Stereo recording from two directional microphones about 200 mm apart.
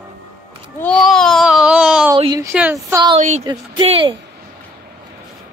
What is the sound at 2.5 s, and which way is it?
Speech, 5° right (ahead or behind).